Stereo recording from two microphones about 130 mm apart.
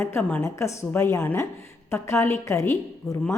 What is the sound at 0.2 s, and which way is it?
Speech, 10° left (ahead or behind).